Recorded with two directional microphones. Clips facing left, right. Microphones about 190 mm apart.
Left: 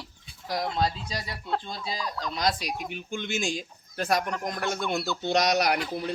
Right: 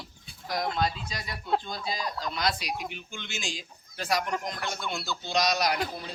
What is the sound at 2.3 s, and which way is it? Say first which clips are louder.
Speech: left 4 dB; 45° left (ahead or behind).